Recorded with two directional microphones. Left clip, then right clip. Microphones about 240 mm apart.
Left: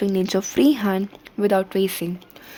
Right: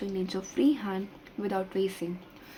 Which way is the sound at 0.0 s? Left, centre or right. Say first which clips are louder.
Left 12 dB; left.